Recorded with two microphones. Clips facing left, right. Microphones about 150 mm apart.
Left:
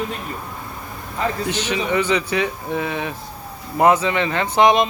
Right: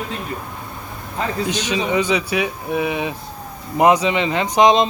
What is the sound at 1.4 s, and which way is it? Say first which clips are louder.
Speech: right 1 dB; 15° right (ahead or behind).